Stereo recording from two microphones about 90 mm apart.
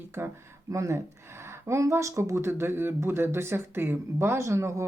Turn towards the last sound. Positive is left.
turn(degrees=-30)  # may be behind; listen again after turning